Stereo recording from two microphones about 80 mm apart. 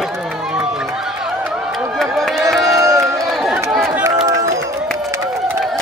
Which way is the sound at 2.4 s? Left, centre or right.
Right.